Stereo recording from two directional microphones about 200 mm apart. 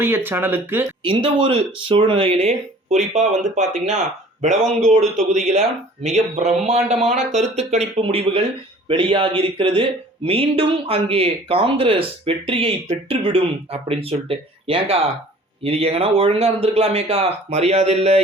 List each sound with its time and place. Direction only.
0.0 s speech: 10° right (ahead or behind)
1.0 s speech: 25° right (ahead or behind)